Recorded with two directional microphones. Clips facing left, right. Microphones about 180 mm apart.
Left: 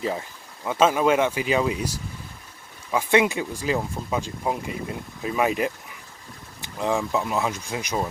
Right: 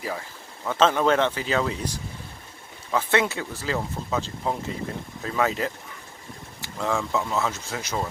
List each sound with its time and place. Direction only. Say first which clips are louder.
0.0 s speech: left 4 dB; 25° left (ahead or behind)
0.6 s speech: left 1 dB; 10° left (ahead or behind)